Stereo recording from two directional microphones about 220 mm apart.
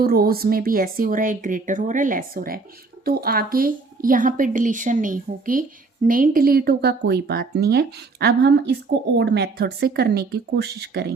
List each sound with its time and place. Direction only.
0.0 s a woman's voice: 45° right (ahead or behind)